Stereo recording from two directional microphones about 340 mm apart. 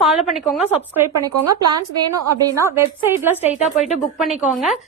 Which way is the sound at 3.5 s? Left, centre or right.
Centre.